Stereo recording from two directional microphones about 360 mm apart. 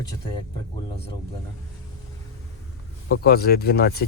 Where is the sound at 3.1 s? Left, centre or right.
Left.